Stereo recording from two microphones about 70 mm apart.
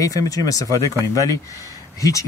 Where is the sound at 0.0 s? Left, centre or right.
Left.